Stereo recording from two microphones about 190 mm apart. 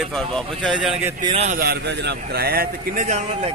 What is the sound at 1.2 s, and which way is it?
Speech, 35° right (ahead or behind).